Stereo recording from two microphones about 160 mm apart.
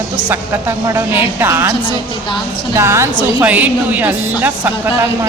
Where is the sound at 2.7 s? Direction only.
15° right (ahead or behind).